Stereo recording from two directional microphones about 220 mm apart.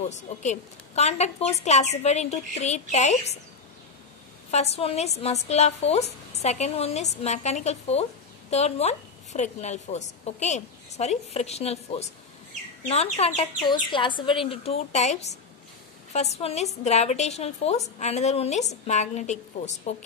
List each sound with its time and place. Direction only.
0.1 s a woman's voice: 30° left (ahead or behind)
4.5 s a woman's voice: 30° left (ahead or behind)